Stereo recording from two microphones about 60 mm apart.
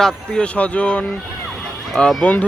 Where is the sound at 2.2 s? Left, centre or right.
Left.